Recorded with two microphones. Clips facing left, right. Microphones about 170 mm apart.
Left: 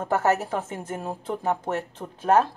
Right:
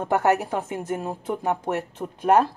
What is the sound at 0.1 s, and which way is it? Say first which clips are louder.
Speech: right 2 dB; 15° right (ahead or behind).